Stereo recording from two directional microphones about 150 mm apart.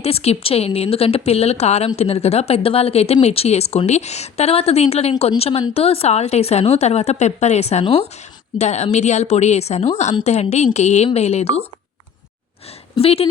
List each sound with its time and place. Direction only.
0.0 s speech: 45° left (ahead or behind)
13.0 s speech: 40° left (ahead or behind)